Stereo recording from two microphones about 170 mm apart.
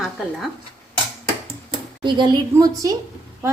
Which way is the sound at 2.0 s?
25° right (ahead or behind).